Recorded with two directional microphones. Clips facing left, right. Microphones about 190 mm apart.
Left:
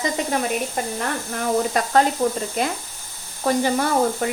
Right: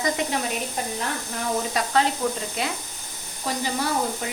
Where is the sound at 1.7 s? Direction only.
50° left (ahead or behind).